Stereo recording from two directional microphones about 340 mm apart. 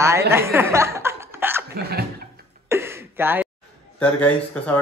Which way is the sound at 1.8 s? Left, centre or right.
Right.